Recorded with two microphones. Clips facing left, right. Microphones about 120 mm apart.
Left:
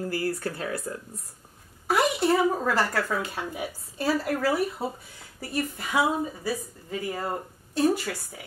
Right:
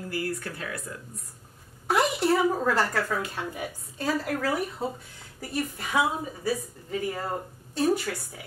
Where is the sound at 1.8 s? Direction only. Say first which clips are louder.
Left 1 dB; centre (ahead or behind).